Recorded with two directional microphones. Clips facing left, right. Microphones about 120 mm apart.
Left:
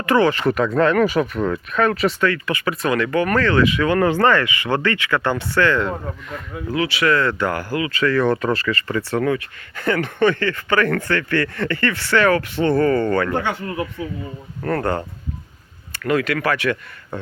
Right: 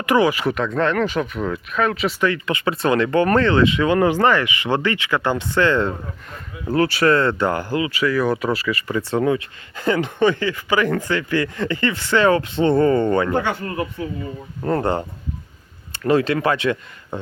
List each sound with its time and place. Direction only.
0.0 s speech: 15° right (ahead or behind)
0.5 s speech: 5° left (ahead or behind)
2.2 s speech: 20° right (ahead or behind)
6.7 s speech: 40° right (ahead or behind); by 13.3 s 20° right (ahead or behind)
13.3 s speech: 30° right (ahead or behind)
14.6 s speech: 20° right (ahead or behind)